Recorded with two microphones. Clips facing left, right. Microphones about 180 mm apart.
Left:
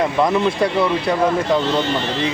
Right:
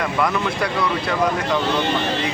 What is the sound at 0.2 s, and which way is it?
Speech, 25° left (ahead or behind).